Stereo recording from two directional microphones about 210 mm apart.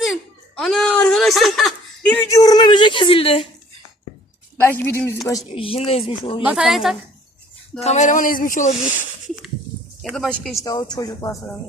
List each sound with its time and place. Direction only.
0.6 s a sound: centre (ahead or behind); by 3.4 s 25° left (ahead or behind)
4.6 s speech: 10° left (ahead or behind)
5.5 s speech: 25° left (ahead or behind)
6.4 s a man's voice: 5° right (ahead or behind)
7.8 s speech: 35° left (ahead or behind)
10.0 s a man's voice: centre (ahead or behind)
10.6 s speech: 20° left (ahead or behind)